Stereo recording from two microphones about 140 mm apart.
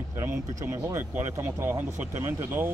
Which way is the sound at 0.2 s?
20° right (ahead or behind).